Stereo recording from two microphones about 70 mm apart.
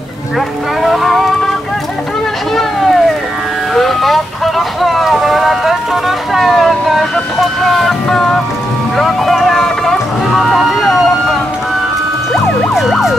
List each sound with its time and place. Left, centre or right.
0.8 s music: centre
2.5 s a sound: centre
3.7 s speech: centre
8.9 s music: centre
12.3 s emergency vehicle: centre